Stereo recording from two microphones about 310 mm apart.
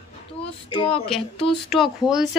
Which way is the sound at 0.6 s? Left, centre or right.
Centre.